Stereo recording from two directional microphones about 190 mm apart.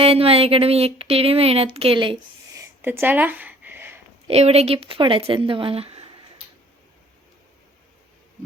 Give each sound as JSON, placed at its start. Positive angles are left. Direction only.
{"t": 0.0, "sound": "speech", "side_deg": -30}
{"t": 4.3, "sound": "speech", "side_deg": -35}